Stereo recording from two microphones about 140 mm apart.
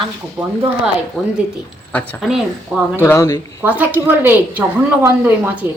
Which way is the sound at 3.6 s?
10° right (ahead or behind).